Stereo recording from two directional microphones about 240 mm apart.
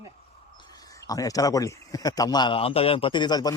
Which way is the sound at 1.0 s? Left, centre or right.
Centre.